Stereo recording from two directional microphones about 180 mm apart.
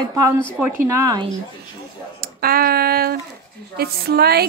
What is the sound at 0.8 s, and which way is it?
Speech, 15° right (ahead or behind).